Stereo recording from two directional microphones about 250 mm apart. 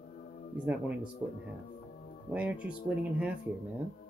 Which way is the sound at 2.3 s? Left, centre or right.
Centre.